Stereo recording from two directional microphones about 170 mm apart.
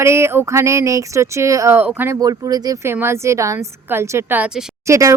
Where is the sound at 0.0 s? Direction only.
15° right (ahead or behind).